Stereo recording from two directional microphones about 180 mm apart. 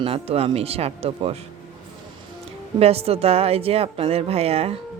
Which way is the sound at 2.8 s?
35° right (ahead or behind).